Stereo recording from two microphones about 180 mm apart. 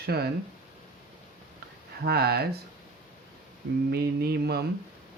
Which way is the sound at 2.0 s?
60° right (ahead or behind).